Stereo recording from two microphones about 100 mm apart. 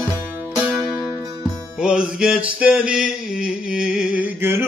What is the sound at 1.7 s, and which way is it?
Music, 10° right (ahead or behind).